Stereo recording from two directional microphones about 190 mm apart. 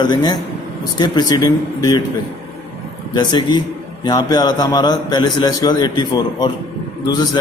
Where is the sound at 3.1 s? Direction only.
25° left (ahead or behind).